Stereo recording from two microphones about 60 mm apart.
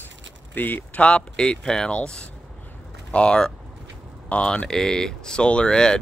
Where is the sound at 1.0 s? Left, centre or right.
Centre.